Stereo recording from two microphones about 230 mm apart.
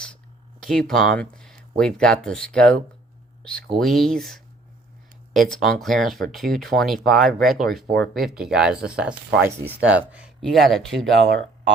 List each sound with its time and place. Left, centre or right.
0.6 s speech: centre
3.8 s speech: centre